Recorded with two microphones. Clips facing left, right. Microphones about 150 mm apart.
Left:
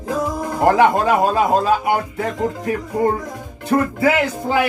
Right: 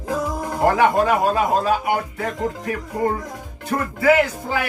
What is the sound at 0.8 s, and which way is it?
Speech, 30° left (ahead or behind).